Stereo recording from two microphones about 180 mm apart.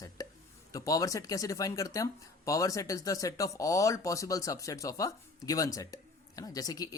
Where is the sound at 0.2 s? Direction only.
20° left (ahead or behind).